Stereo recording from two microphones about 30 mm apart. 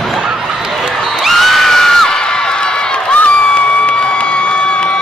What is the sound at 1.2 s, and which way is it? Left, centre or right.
Crowd, centre.